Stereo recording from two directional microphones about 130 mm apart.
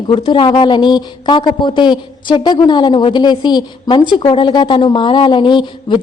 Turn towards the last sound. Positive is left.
turn(degrees=35)  # may be behind; listen again after turning